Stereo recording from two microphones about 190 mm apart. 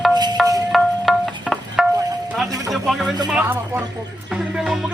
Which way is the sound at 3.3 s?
10° right (ahead or behind).